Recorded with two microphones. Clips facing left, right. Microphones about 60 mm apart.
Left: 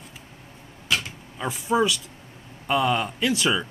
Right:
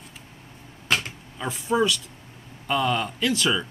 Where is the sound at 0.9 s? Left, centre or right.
Right.